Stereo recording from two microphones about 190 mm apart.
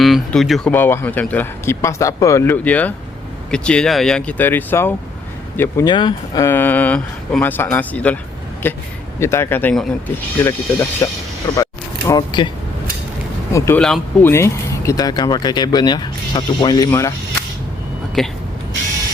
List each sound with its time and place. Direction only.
0.0 s speech: centre (ahead or behind)
11.5 s single-lens reflex camera: 20° left (ahead or behind)
13.5 s speech: 15° left (ahead or behind)
18.2 s speech: centre (ahead or behind)